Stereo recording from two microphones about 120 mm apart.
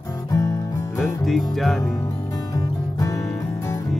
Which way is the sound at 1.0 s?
Centre (ahead or behind).